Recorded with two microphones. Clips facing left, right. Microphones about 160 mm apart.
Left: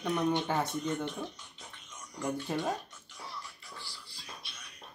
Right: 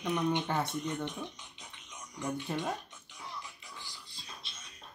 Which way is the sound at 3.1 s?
15° right (ahead or behind).